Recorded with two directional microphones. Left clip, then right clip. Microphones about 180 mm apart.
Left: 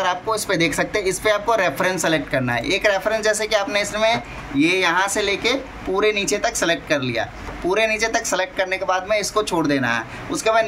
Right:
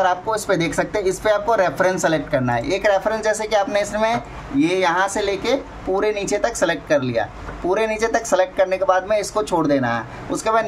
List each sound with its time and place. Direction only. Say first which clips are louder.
0.0 s speech: right 2 dB; 40° right (ahead or behind)